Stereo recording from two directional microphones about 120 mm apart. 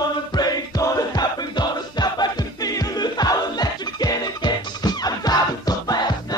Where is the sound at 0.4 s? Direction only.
30° left (ahead or behind).